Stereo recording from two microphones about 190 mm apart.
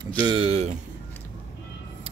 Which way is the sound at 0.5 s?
35° right (ahead or behind).